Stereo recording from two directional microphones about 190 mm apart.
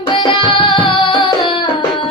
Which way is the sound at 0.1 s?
25° left (ahead or behind).